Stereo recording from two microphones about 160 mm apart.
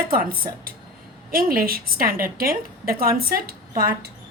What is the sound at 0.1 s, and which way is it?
A woman's voice, 65° right (ahead or behind).